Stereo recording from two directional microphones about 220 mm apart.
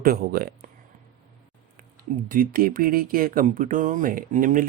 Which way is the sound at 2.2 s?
40° right (ahead or behind).